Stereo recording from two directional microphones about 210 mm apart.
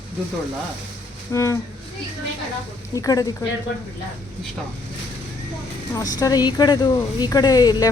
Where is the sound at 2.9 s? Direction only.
15° left (ahead or behind).